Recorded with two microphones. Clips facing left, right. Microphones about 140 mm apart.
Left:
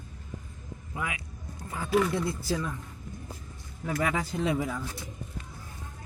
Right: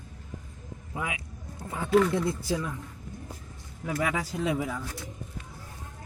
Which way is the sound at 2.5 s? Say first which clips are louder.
Right 1 dB; 5° right (ahead or behind).